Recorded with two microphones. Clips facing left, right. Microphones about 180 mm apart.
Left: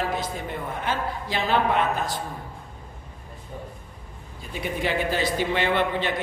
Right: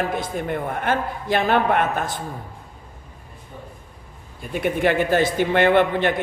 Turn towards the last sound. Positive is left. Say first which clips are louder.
# right 7 dB
turn(degrees=-50)  # may be behind; listen again after turning